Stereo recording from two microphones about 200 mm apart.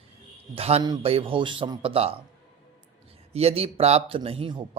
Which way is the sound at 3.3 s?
30° right (ahead or behind).